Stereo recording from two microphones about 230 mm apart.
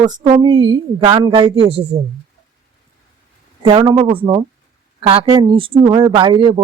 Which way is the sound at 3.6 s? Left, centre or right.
Centre.